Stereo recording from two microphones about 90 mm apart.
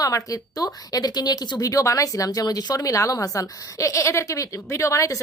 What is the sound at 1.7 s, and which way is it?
A woman's voice, 40° left (ahead or behind).